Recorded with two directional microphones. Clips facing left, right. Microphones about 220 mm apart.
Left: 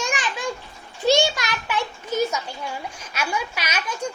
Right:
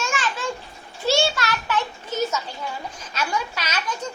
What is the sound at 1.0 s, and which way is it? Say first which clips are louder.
Children playing: left 2 dB; 15° left (ahead or behind).